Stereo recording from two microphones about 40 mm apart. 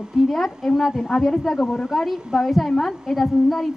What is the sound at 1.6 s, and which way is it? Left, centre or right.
Speech, left.